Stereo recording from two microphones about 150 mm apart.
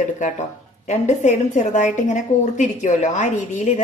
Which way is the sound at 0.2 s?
50° left (ahead or behind).